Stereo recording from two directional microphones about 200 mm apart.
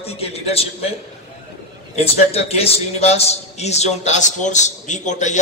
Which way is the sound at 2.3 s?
30° left (ahead or behind).